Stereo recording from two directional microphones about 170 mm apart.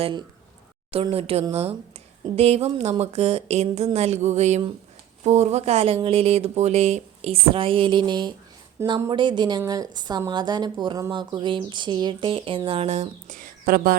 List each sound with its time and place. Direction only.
0.0 s a woman's voice: 25° right (ahead or behind)
8.8 s speech: 15° right (ahead or behind)
9.0 s a woman's voice: 25° right (ahead or behind); by 13.9 s 55° right (ahead or behind)